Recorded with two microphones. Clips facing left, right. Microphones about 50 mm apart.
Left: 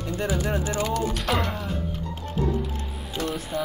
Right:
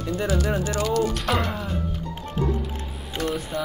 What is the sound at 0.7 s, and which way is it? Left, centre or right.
Speech, left.